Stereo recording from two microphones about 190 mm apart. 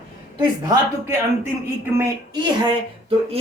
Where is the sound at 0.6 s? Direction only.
15° right (ahead or behind).